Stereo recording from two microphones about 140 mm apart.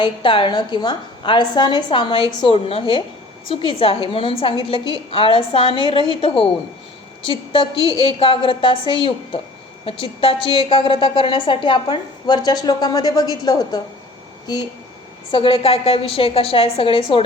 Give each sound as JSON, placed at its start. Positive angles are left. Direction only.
{"t": 0.0, "sound": "a woman's voice", "side_deg": 35}
{"t": 15.3, "sound": "a woman's voice", "side_deg": 40}